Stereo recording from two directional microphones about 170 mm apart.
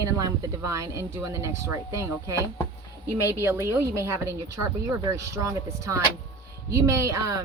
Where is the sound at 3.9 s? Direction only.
15° right (ahead or behind).